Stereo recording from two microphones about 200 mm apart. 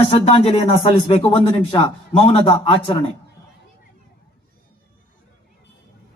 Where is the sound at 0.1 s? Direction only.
30° left (ahead or behind).